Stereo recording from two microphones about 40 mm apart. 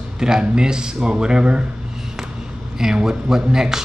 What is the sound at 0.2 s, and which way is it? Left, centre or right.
Speech, centre.